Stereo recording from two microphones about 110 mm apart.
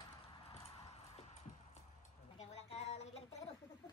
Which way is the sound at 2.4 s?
75° left (ahead or behind).